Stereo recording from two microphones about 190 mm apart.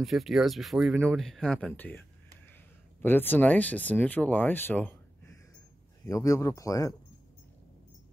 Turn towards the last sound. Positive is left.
turn(degrees=15)  # may be behind; listen again after turning